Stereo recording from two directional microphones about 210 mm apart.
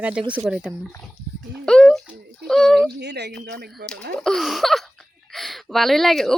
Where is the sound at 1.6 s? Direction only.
Centre (ahead or behind).